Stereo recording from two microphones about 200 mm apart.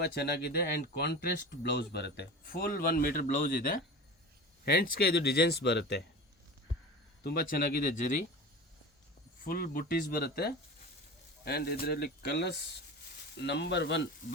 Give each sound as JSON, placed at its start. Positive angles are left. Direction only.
{"t": 0.0, "sound": "speech", "side_deg": 55}
{"t": 7.3, "sound": "speech", "side_deg": 45}
{"t": 9.4, "sound": "speech", "side_deg": 45}